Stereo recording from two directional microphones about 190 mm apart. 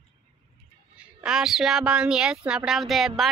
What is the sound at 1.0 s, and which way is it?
A woman's voice, 5° right (ahead or behind).